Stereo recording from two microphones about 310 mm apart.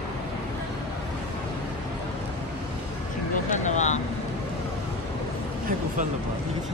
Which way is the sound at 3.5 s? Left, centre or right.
Left.